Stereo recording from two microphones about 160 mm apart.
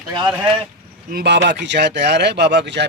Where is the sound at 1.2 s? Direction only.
90° right.